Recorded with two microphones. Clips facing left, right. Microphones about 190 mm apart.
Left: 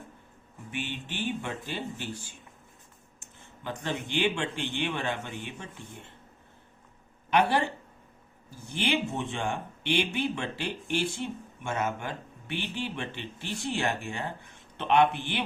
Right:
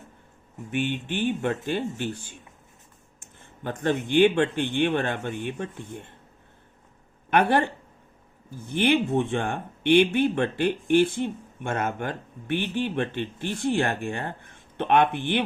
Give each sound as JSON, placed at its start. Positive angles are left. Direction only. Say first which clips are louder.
{"t": 0.7, "sound": "a man's voice", "louder": "right 9 dB", "side_deg": -55}
{"t": 3.6, "sound": "a man's voice", "louder": "right 8 dB", "side_deg": -50}
{"t": 7.3, "sound": "speech", "louder": "right 4 dB", "side_deg": -55}